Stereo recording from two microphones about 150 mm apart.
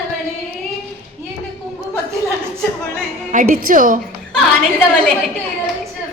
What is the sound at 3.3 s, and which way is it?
Speech, 65° right (ahead or behind).